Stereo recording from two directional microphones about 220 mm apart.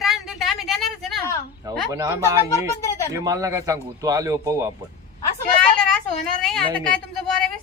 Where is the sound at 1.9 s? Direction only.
15° right (ahead or behind).